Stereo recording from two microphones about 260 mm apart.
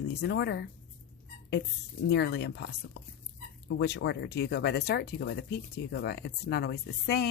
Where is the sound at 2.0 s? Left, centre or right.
Left.